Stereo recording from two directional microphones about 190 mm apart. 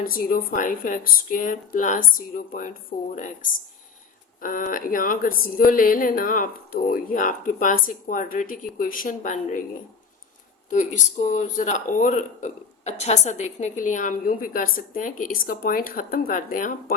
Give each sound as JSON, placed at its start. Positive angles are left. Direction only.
{"t": 0.0, "sound": "speech", "side_deg": 50}
{"t": 4.4, "sound": "speech", "side_deg": 45}
{"t": 10.7, "sound": "speech", "side_deg": 40}